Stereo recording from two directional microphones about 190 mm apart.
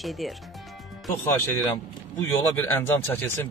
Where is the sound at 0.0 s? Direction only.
Centre (ahead or behind).